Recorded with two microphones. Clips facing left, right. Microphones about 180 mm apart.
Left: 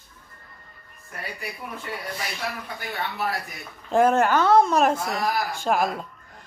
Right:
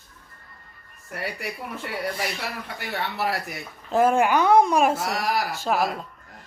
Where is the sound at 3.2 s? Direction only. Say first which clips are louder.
Right 3 dB; 75° right (ahead or behind).